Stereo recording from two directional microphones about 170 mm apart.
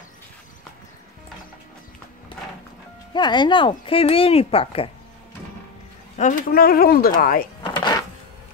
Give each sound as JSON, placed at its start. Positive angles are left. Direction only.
{"t": 3.1, "sound": "speech", "side_deg": 25}
{"t": 6.1, "sound": "speech", "side_deg": 50}
{"t": 7.6, "sound": "a sound", "side_deg": 25}